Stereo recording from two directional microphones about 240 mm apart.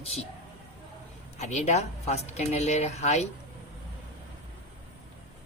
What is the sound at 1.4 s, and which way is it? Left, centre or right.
Speech, left.